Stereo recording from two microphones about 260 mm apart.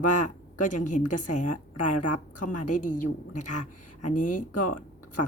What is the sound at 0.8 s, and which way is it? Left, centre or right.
Speech, left.